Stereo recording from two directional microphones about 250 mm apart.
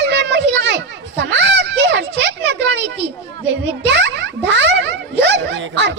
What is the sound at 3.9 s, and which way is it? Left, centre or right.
Music, right.